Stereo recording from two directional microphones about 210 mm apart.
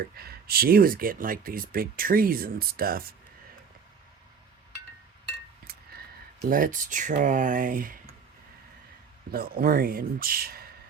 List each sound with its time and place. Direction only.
0.2 s speech: 45° right (ahead or behind)
6.5 s speech: 40° right (ahead or behind)
9.3 s speech: 45° right (ahead or behind)